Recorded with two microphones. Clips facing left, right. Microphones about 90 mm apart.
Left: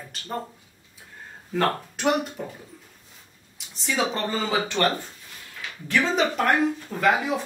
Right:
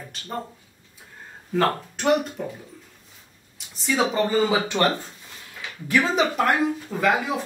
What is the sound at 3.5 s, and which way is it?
Speech, 5° right (ahead or behind).